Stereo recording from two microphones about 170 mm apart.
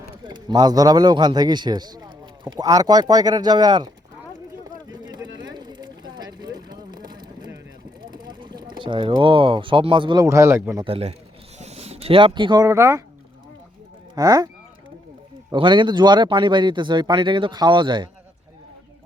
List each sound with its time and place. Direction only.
0.3 s speech: 25° right (ahead or behind)
5.0 s a sound: 25° right (ahead or behind)
8.1 s speech: 25° right (ahead or behind)
10.2 s speech: 15° right (ahead or behind)
10.8 s a man's voice: 35° right (ahead or behind); by 13.0 s 15° right (ahead or behind)
14.2 s speech: 20° right (ahead or behind)
15.5 s speech: 30° right (ahead or behind)